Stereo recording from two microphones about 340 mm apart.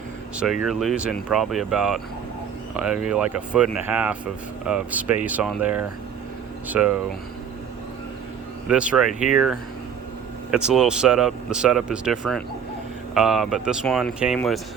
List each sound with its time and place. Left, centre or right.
0.3 s speech: centre
8.6 s speech: centre